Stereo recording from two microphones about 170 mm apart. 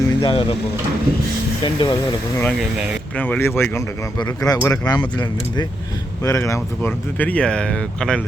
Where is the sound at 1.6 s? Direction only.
30° left (ahead or behind).